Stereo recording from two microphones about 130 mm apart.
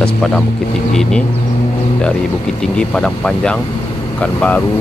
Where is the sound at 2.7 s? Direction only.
5° left (ahead or behind).